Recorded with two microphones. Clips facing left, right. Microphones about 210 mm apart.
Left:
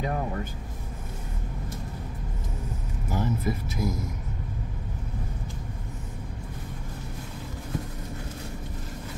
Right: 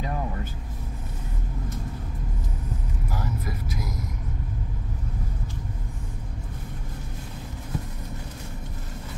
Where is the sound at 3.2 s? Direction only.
25° left (ahead or behind).